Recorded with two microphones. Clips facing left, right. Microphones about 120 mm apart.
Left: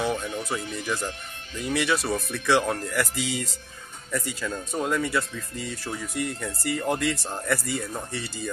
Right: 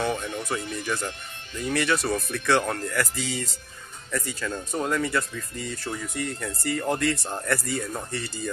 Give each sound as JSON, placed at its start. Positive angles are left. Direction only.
{"t": 0.0, "sound": "speech", "side_deg": 10}